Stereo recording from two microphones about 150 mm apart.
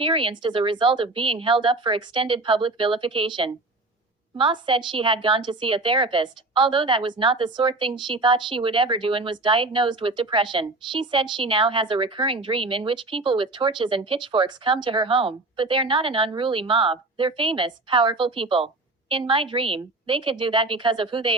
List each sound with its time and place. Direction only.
0.0 s a woman's voice: 35° right (ahead or behind)